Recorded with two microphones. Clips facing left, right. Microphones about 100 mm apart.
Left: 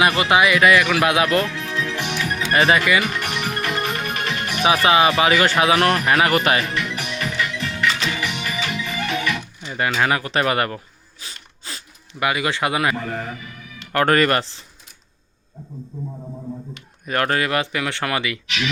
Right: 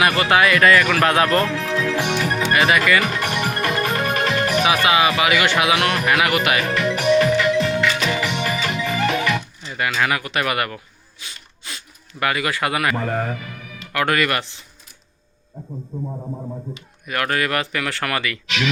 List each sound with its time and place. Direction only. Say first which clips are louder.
0.0 s speech: even; 20° left (ahead or behind)
1.3 s speech: right 2 dB; 40° right (ahead or behind)
2.0 s music: right 4 dB; 35° right (ahead or behind)
2.5 s speech: left 1 dB; 30° left (ahead or behind)
3.2 s music: right 3 dB; 40° right (ahead or behind)
4.6 s speech: left 4 dB; 30° left (ahead or behind)
6.7 s music: right 9 dB; 40° right (ahead or behind)
9.7 s speech: left 1 dB; 30° left (ahead or behind)
11.6 s a sound: even; 30° left (ahead or behind)
12.2 s speech: even; 20° left (ahead or behind)
13.0 s speech: right 4 dB; 40° right (ahead or behind)
13.9 s speech: left 3 dB; 40° left (ahead or behind)
17.1 s speech: left 1 dB; 30° left (ahead or behind)